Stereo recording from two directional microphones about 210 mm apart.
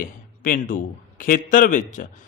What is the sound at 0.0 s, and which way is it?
A man's voice, 40° left (ahead or behind).